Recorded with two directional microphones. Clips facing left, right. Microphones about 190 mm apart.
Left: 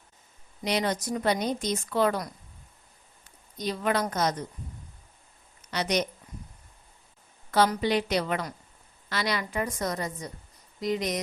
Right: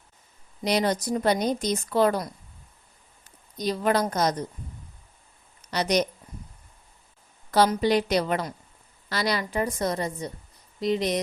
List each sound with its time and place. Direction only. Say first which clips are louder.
0.6 s a woman's voice: right 4 dB; 35° right (ahead or behind)
3.6 s a woman's voice: right 4 dB; 40° right (ahead or behind)
5.7 s a woman's voice: right 4 dB; 40° right (ahead or behind)
7.8 s a woman's voice: right 4 dB; 40° right (ahead or behind)